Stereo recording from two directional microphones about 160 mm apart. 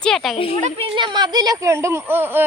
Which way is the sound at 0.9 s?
30° right (ahead or behind).